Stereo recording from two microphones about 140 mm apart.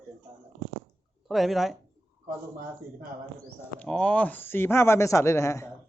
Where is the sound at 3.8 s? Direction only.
5° left (ahead or behind).